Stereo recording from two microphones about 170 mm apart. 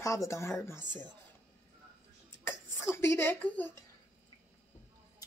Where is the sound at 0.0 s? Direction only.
20° left (ahead or behind).